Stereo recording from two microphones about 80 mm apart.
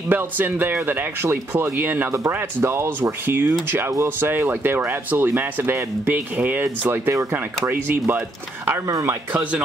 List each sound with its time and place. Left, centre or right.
0.1 s speech: right